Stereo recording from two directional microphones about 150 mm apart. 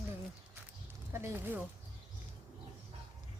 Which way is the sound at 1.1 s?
15° right (ahead or behind).